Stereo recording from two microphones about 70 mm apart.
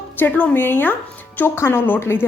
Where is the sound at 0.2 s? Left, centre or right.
Left.